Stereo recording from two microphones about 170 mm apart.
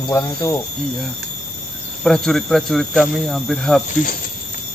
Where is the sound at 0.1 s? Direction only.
15° left (ahead or behind).